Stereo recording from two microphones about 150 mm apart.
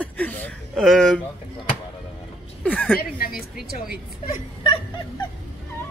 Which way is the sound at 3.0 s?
80° left.